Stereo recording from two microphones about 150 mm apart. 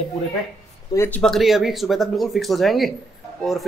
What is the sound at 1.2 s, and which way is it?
Speech, centre (ahead or behind).